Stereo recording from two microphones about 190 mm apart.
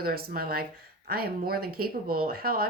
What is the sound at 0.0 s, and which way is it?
Speech, 55° right (ahead or behind).